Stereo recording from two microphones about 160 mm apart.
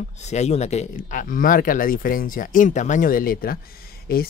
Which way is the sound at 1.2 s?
60° left (ahead or behind).